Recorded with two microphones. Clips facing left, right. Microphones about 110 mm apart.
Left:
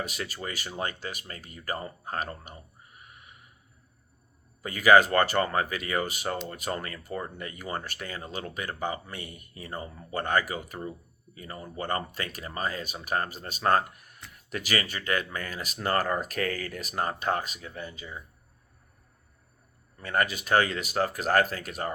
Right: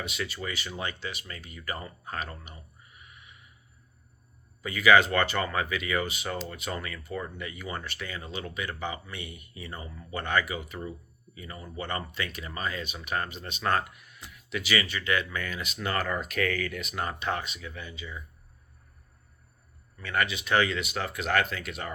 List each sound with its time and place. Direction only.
0.0 s speech: 40° left (ahead or behind)
4.6 s speech: 40° left (ahead or behind)
20.0 s speech: 40° left (ahead or behind)